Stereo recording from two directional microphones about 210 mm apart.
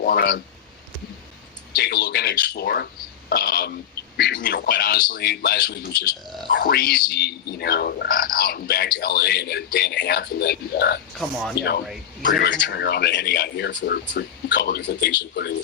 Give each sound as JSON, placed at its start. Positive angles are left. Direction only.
{"t": 0.0, "sound": "speech", "side_deg": 45}
{"t": 1.7, "sound": "speech", "side_deg": 50}
{"t": 12.2, "sound": "speech", "side_deg": 50}